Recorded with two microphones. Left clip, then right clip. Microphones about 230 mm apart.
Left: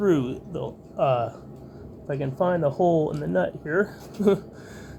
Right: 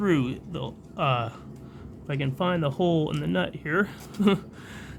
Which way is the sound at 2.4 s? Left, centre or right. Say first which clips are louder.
Left 5 dB; right.